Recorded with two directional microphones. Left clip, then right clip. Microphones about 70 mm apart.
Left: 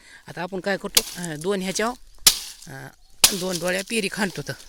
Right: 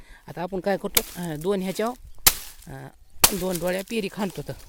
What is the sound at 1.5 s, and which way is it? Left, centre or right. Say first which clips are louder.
Speech: left 1 dB; centre.